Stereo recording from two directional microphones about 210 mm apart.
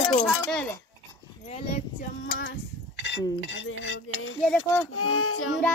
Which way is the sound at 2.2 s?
55° left (ahead or behind).